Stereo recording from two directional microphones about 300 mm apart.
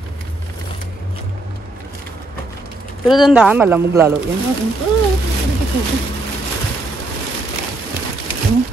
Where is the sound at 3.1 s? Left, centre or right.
Centre.